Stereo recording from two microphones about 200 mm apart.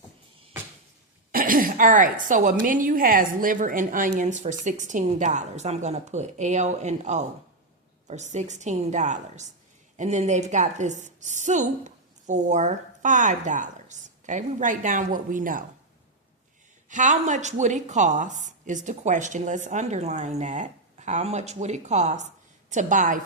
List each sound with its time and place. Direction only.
1.3 s a woman's voice: 45° right (ahead or behind)
16.9 s a woman's voice: 40° right (ahead or behind)